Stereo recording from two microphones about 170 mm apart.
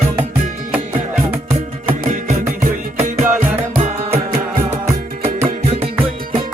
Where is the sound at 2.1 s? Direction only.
50° right (ahead or behind).